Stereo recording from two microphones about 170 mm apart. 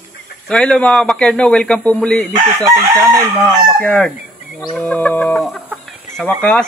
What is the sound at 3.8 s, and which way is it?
Chicken, 10° left (ahead or behind).